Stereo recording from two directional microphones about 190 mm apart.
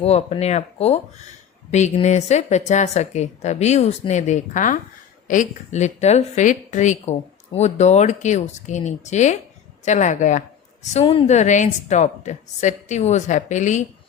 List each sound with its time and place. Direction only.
0.0 s a woman's voice: 35° left (ahead or behind)